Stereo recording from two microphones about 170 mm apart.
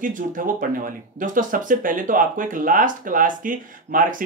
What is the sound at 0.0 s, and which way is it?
Speech, 50° right (ahead or behind).